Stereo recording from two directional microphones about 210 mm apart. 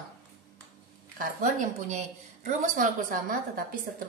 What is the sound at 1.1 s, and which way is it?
A woman's voice, 40° right (ahead or behind).